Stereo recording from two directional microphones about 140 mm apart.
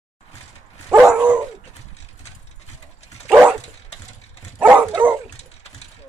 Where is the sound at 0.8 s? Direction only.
10° right (ahead or behind).